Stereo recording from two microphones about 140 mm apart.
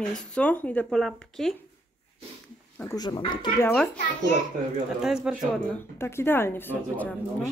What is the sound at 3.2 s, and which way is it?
Speech, 35° left (ahead or behind).